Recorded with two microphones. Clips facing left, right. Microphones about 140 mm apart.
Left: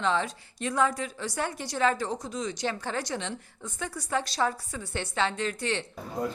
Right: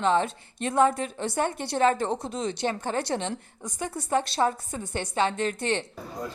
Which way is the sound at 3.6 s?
20° right (ahead or behind).